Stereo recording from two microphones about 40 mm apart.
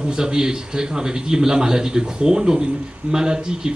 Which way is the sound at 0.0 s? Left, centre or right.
Right.